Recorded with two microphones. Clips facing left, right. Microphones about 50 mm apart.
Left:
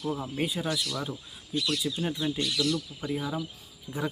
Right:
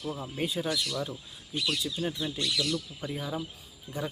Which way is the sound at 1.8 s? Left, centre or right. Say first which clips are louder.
Left 2 dB; centre.